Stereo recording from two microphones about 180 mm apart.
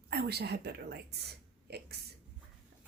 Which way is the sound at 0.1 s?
65° right (ahead or behind).